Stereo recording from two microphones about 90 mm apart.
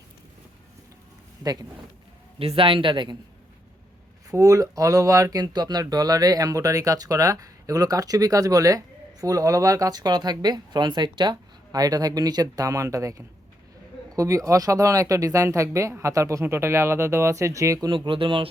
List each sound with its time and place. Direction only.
2.4 s a man's voice: 90° right; by 3.2 s 60° right (ahead or behind)
4.3 s speech: 40° right (ahead or behind)
17.9 s a man's voice: 75° right (ahead or behind)